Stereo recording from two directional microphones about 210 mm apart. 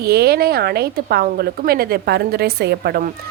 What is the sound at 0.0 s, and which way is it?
A woman's voice, 50° right (ahead or behind).